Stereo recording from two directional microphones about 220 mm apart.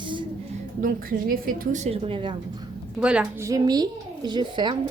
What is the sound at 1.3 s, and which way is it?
A woman's voice, 40° right (ahead or behind).